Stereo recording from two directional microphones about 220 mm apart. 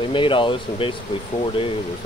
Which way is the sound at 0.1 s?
20° left (ahead or behind).